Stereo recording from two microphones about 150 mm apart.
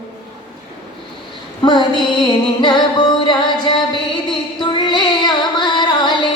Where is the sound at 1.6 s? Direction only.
30° left (ahead or behind).